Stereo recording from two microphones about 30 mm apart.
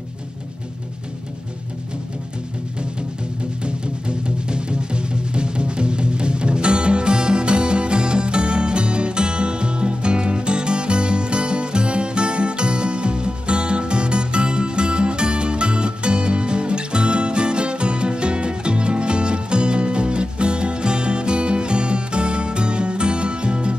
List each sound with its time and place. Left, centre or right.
4.5 s music: right